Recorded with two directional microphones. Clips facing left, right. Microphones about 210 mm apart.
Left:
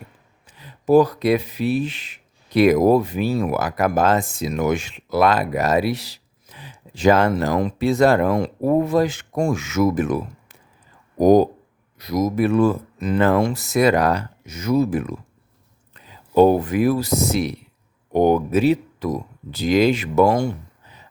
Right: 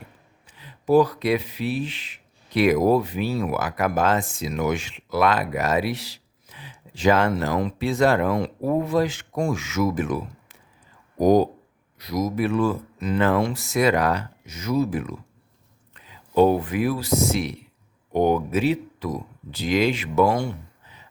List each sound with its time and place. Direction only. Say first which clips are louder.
0.4 s speech: left 4 dB; 45° left (ahead or behind)
16.0 s speech: left 4 dB; 45° left (ahead or behind)